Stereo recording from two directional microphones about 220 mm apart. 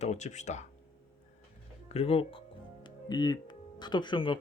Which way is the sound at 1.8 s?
30° left (ahead or behind).